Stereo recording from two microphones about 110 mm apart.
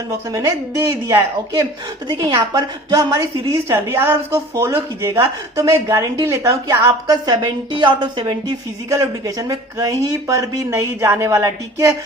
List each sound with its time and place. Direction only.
0.3 s speech: 30° right (ahead or behind)
2.0 s speech: 40° right (ahead or behind); by 6.7 s 25° right (ahead or behind)
7.1 s a woman's voice: 40° right (ahead or behind)
8.9 s speech: 30° right (ahead or behind)